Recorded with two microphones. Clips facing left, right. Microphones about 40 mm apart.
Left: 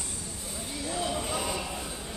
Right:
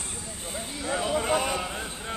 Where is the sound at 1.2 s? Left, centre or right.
Right.